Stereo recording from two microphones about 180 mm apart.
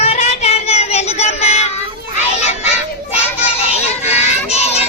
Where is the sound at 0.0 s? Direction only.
35° left (ahead or behind).